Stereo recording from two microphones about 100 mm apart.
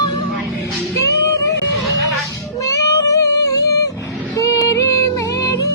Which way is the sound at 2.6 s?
35° left (ahead or behind).